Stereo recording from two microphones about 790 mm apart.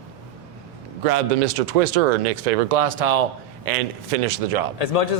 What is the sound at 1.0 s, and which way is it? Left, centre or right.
Speech, right.